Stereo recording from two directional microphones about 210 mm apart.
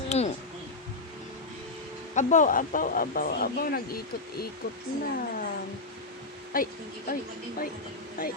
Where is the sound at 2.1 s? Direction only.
35° left (ahead or behind).